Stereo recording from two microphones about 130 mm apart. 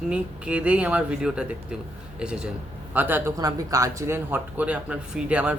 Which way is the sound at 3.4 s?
25° right (ahead or behind).